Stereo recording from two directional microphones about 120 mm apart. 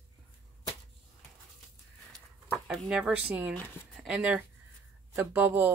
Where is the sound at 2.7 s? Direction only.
5° right (ahead or behind).